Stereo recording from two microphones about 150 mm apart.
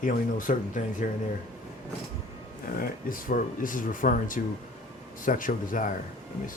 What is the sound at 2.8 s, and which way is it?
Speech, 65° left (ahead or behind).